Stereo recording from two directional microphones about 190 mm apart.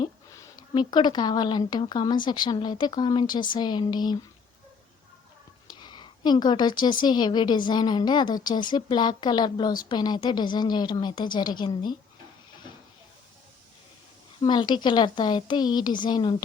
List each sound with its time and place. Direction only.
0.0 s a woman's voice: 20° left (ahead or behind)
5.6 s a woman's voice: 25° left (ahead or behind)
14.4 s a woman's voice: 25° left (ahead or behind)